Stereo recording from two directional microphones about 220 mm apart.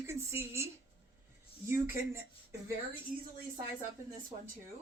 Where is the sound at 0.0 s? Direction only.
10° right (ahead or behind).